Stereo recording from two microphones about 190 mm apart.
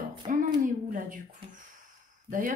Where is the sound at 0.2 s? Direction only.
30° right (ahead or behind).